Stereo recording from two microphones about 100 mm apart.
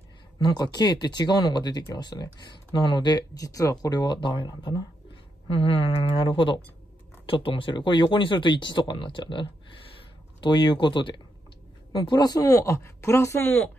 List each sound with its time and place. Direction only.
0.4 s speech: 45° left (ahead or behind)
5.5 s speech: 75° left (ahead or behind)
6.1 s speech: 50° left (ahead or behind); by 13.7 s 20° left (ahead or behind)